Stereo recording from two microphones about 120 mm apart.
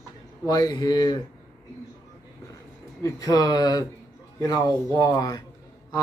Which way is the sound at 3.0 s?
30° left (ahead or behind).